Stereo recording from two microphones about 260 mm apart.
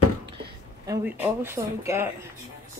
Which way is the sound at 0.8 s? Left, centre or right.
Centre.